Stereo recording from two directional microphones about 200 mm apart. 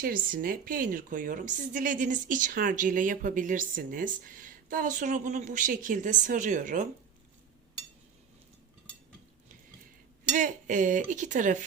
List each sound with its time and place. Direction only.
0.0 s a woman's voice: 45° right (ahead or behind)
10.3 s a woman's voice: 40° right (ahead or behind)